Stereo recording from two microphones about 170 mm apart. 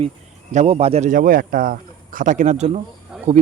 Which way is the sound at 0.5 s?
40° right (ahead or behind).